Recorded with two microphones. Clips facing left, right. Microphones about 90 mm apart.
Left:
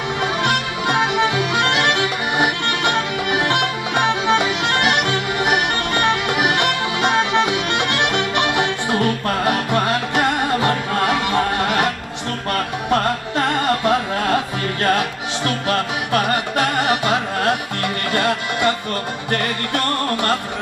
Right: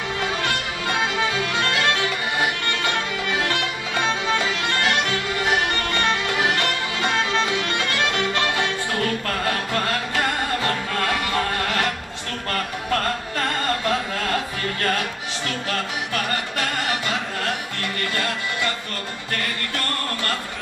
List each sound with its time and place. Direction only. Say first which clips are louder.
0.2 s music: left 6 dB; 20° left (ahead or behind)